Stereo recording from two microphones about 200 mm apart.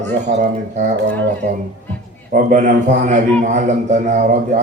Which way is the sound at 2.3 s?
40° right (ahead or behind).